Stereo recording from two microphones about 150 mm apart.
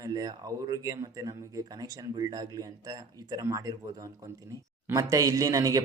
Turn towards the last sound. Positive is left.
turn(degrees=-20)  # may be behind; listen again after turning